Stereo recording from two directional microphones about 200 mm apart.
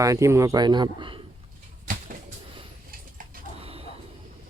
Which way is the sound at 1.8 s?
40° right (ahead or behind).